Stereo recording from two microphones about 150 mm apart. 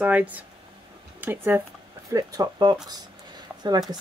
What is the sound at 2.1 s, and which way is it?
Speech, 25° right (ahead or behind).